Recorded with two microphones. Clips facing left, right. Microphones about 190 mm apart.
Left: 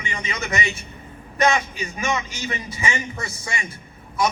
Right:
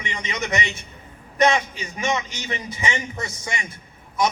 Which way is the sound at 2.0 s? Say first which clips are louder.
Right 1 dB; 20° right (ahead or behind).